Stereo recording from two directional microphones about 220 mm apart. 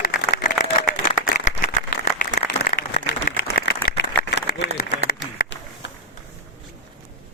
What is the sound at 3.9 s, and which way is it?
Applause, 40° left (ahead or behind).